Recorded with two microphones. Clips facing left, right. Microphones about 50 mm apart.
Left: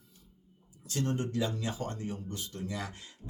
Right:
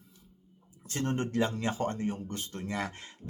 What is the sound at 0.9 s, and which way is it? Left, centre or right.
Speech, right.